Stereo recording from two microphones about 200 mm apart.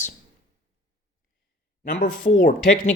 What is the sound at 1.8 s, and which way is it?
Speech, 45° left (ahead or behind).